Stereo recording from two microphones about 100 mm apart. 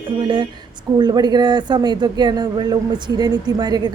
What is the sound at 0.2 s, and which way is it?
Speech, 50° right (ahead or behind).